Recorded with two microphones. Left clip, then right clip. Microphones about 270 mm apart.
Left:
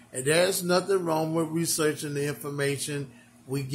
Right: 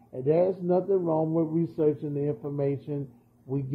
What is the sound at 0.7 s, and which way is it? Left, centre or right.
Speech, left.